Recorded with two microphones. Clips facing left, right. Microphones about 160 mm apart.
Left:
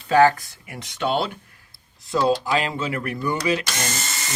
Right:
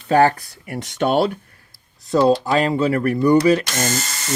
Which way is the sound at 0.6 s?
45° right (ahead or behind).